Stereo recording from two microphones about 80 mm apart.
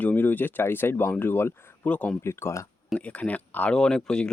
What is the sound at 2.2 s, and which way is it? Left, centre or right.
Speech, left.